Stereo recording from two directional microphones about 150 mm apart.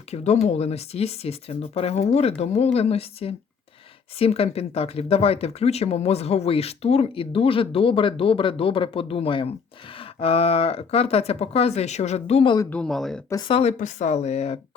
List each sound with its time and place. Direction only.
0.1 s speech: 50° left (ahead or behind)
12.7 s speech: 5° left (ahead or behind)
13.3 s speech: 35° left (ahead or behind)